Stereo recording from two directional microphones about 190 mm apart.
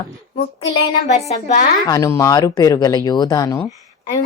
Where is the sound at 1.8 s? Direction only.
15° left (ahead or behind).